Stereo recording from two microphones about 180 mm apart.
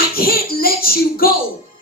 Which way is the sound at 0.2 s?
55° left (ahead or behind).